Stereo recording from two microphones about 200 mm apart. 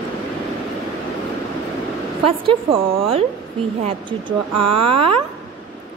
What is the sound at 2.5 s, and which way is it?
Speech, 25° right (ahead or behind).